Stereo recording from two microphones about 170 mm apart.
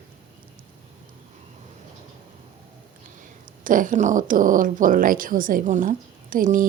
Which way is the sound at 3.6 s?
50° right (ahead or behind).